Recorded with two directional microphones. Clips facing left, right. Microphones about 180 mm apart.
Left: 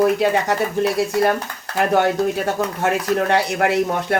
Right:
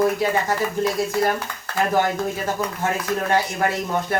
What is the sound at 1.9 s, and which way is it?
Speech, 70° left (ahead or behind).